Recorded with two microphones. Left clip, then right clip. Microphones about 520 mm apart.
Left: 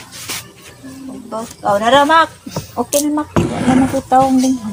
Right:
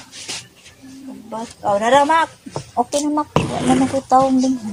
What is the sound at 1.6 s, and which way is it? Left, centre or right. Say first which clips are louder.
Speech: left 3 dB; right.